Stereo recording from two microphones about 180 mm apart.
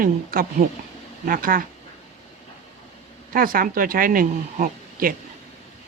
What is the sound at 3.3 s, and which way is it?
Speech, 50° right (ahead or behind).